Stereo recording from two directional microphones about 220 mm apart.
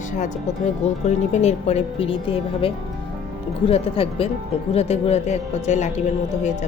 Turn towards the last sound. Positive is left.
turn(degrees=30)  # may be behind; listen again after turning